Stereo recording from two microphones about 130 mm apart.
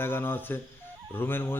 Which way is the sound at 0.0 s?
15° left (ahead or behind).